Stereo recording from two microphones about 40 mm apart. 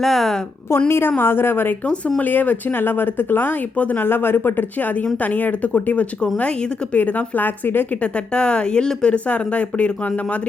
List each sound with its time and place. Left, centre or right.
0.0 s a woman's voice: centre
0.9 s a woman's voice: left
1.2 s a woman's voice: left
1.8 s speech: left
2.2 s speech: left
2.7 s speech: left
3.9 s speech: left
4.8 s speech: left
6.3 s speech: left
7.0 s speech: left
8.0 s speech: left
9.1 s speech: left